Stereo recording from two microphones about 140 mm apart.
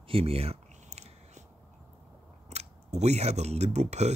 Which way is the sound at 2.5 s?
50° right (ahead or behind).